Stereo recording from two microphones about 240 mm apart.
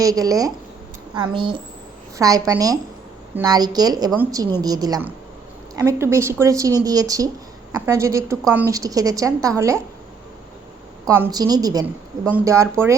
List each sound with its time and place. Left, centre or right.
0.0 s a woman's voice: centre
11.0 s speech: centre